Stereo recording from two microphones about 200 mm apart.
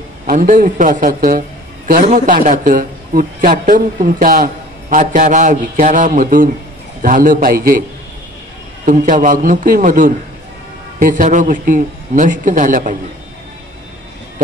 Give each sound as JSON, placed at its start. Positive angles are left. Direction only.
{"t": 0.3, "sound": "a man's voice", "side_deg": -45}
{"t": 8.8, "sound": "a man's voice", "side_deg": -40}